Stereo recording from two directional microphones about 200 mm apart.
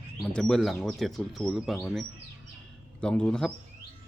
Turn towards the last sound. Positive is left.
turn(degrees=5)  # may be behind; listen again after turning